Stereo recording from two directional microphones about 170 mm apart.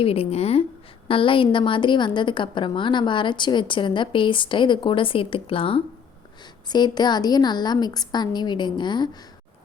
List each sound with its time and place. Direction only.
0.0 s a woman's voice: 35° left (ahead or behind)